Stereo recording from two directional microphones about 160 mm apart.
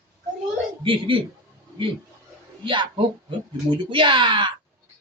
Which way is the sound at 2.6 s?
30° right (ahead or behind).